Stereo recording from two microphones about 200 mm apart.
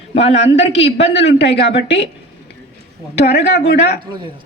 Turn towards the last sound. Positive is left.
turn(degrees=55)  # may be behind; listen again after turning